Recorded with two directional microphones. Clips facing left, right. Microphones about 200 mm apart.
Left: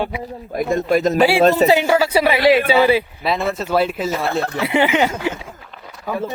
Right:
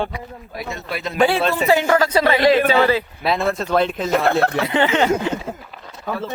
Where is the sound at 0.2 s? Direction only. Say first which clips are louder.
Left 8 dB; 35° left (ahead or behind).